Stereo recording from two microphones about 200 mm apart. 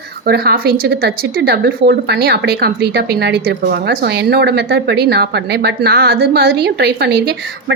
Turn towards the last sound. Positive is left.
turn(degrees=-55)  # may be behind; listen again after turning